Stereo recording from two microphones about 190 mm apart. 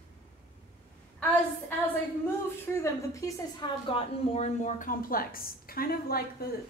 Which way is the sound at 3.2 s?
25° left (ahead or behind).